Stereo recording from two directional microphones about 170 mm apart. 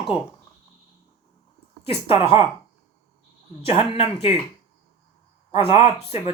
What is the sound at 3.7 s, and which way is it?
Speech, 35° left (ahead or behind).